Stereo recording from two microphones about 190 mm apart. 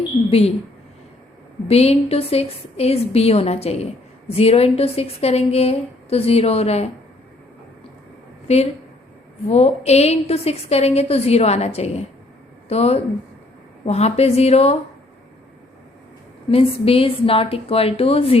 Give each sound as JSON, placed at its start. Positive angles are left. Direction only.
{"t": 0.3, "sound": "a woman's voice", "side_deg": 30}
{"t": 1.6, "sound": "a woman's voice", "side_deg": 30}
{"t": 8.5, "sound": "a woman's voice", "side_deg": 35}
{"t": 16.5, "sound": "a woman's voice", "side_deg": 30}